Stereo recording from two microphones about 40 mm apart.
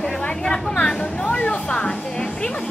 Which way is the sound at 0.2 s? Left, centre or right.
Left.